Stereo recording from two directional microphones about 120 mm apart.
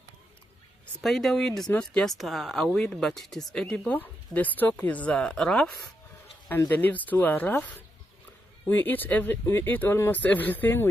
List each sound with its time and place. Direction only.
1.0 s speech: centre (ahead or behind)
6.7 s speech: 15° left (ahead or behind)